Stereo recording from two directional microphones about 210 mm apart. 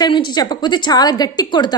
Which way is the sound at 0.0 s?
20° left (ahead or behind).